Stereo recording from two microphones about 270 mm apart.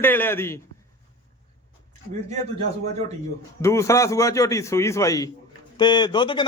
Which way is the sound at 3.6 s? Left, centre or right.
Centre.